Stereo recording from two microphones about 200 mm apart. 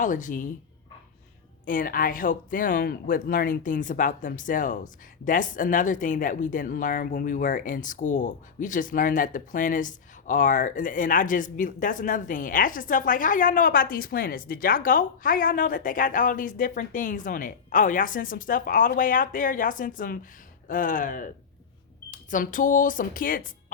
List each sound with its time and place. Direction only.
0.0 s speech: 40° left (ahead or behind)
1.6 s speech: 45° left (ahead or behind)